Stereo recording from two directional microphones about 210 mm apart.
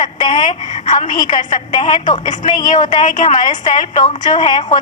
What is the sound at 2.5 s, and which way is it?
Speech, 20° left (ahead or behind).